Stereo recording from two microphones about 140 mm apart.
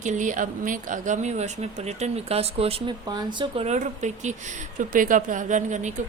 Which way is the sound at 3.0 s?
30° right (ahead or behind).